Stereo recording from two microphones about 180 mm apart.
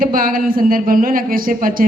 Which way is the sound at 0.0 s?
50° right (ahead or behind).